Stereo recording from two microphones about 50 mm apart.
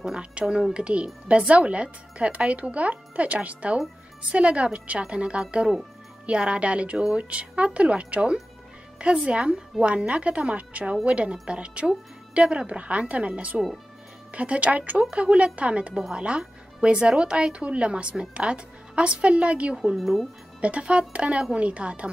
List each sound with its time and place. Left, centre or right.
0.0 s speech: centre
20.0 s speech: centre
20.6 s speech: right